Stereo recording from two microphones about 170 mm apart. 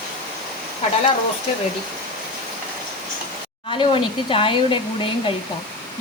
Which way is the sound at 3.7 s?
30° left (ahead or behind).